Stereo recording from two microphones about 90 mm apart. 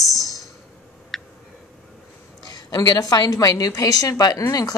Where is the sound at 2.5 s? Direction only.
50° left (ahead or behind).